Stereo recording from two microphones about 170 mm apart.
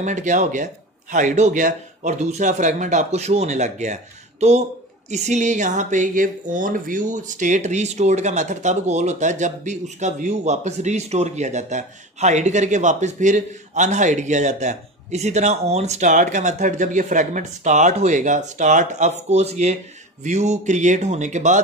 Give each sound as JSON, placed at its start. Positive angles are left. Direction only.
{"t": 0.0, "sound": "speech", "side_deg": -45}